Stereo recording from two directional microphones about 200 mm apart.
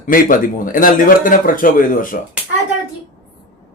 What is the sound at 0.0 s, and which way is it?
A man's voice, 45° left (ahead or behind).